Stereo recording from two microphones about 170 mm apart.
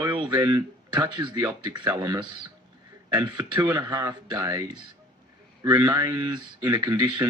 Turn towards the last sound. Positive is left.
turn(degrees=-25)  # may be behind; listen again after turning